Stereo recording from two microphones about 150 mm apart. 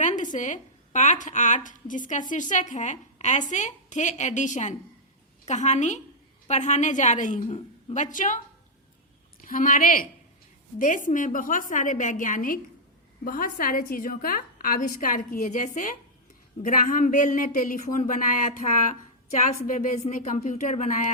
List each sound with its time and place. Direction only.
0.0 s a woman's voice: 55° left (ahead or behind)
9.4 s a woman's voice: 60° left (ahead or behind)